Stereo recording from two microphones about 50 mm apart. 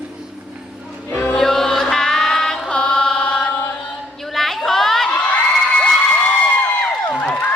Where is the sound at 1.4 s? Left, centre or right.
Centre.